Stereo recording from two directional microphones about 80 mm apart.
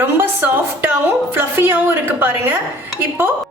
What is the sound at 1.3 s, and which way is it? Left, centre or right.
A woman's voice, right.